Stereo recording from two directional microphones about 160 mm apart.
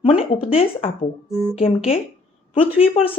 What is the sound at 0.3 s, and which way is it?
Speech, 35° left (ahead or behind).